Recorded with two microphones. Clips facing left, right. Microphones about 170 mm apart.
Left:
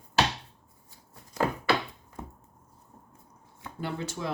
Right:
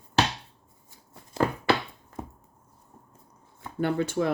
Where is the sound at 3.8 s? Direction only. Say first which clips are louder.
Right 9 dB; 60° right (ahead or behind).